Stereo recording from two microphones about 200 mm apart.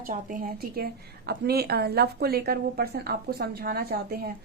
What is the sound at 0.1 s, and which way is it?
A woman's voice, 40° right (ahead or behind).